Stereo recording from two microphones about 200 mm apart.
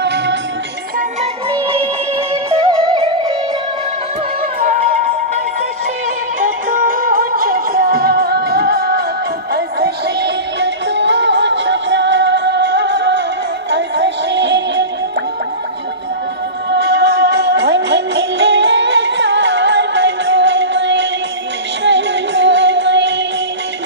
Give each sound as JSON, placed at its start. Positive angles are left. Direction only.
{"t": 0.0, "sound": "music", "side_deg": -60}
{"t": 1.5, "sound": "music", "side_deg": -25}
{"t": 6.7, "sound": "music", "side_deg": -45}
{"t": 16.7, "sound": "music", "side_deg": -55}